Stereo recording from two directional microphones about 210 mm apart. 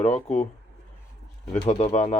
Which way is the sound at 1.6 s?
30° left (ahead or behind).